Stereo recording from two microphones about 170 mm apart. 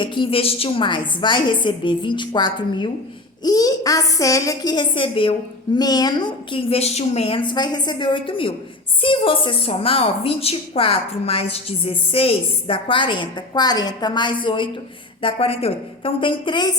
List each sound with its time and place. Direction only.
0.0 s a woman's voice: 30° left (ahead or behind)